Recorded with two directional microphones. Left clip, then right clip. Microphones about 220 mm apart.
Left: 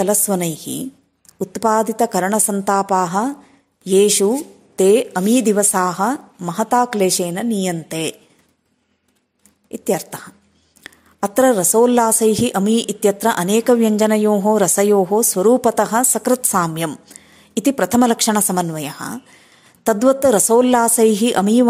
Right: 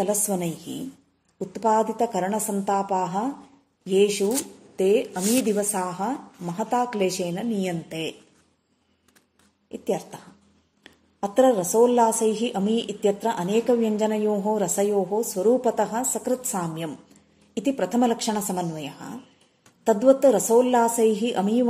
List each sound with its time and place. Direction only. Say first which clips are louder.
0.0 s a woman's voice: left 7 dB; 40° left (ahead or behind)
9.7 s a woman's voice: left 7 dB; 45° left (ahead or behind)